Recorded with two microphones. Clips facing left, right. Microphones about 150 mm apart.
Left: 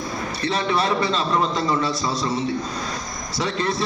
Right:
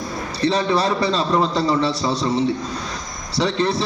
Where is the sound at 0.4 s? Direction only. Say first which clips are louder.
Right 4 dB; 35° right (ahead or behind).